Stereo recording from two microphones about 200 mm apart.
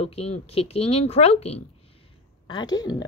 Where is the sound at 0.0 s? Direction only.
30° left (ahead or behind).